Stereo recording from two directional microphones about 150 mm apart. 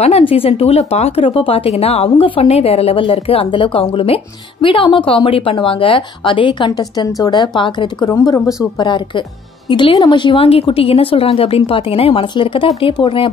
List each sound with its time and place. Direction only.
0.0 s speech: 40° left (ahead or behind)